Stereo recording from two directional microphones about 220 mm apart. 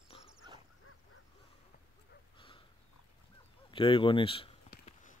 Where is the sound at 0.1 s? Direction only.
25° left (ahead or behind).